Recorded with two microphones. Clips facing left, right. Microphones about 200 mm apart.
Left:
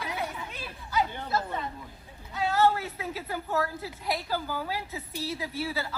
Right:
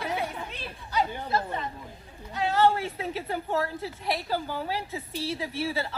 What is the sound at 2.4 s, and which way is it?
A woman's voice, 25° right (ahead or behind).